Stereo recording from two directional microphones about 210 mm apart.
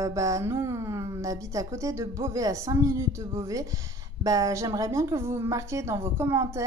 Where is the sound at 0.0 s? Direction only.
15° right (ahead or behind).